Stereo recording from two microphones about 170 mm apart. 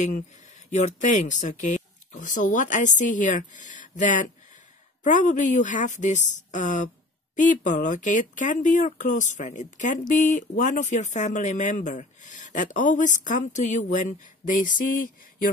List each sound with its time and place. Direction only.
0.7 s speech: 45° left (ahead or behind)